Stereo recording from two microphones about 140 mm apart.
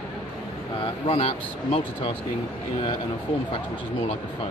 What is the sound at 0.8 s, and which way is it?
Speech, 45° left (ahead or behind).